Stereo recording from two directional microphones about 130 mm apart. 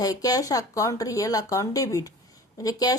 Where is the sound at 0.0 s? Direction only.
30° left (ahead or behind).